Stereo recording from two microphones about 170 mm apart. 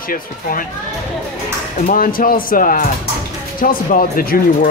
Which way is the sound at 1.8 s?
55° left (ahead or behind).